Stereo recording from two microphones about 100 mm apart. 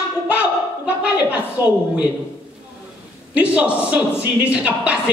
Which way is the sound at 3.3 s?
15° right (ahead or behind).